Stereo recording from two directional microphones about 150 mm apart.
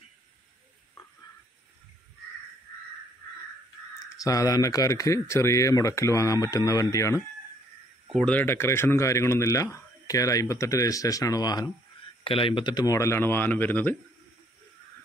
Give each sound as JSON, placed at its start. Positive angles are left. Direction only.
{"t": 4.2, "sound": "speech", "side_deg": 25}
{"t": 8.3, "sound": "speech", "side_deg": 15}
{"t": 12.2, "sound": "speech", "side_deg": 35}